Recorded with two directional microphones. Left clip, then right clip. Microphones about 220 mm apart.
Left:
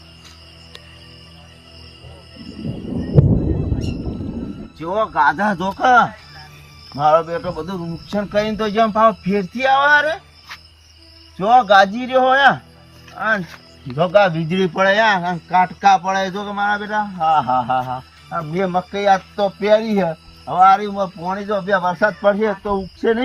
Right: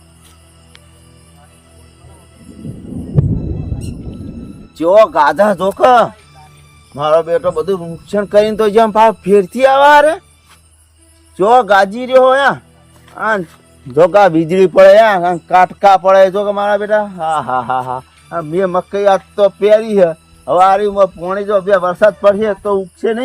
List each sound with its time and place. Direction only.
4.1 s music: centre (ahead or behind)
4.8 s a man's voice: 25° right (ahead or behind)
11.3 s a man's voice: 20° right (ahead or behind)